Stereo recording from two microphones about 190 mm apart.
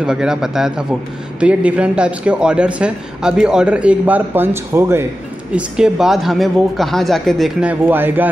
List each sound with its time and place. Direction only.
0.0 s a woman's voice: 5° right (ahead or behind)